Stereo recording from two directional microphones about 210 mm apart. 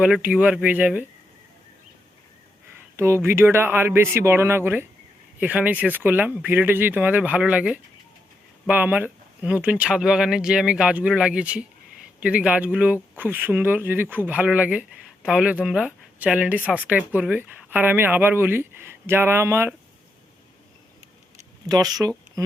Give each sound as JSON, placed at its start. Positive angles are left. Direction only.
{"t": 0.0, "sound": "speech", "side_deg": -5}
{"t": 3.0, "sound": "speech", "side_deg": -10}
{"t": 21.7, "sound": "speech", "side_deg": -20}